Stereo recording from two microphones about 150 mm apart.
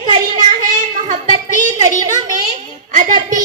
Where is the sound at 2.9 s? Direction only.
55° right (ahead or behind).